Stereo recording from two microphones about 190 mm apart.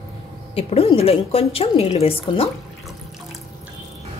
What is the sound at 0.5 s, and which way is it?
Speech, 30° left (ahead or behind).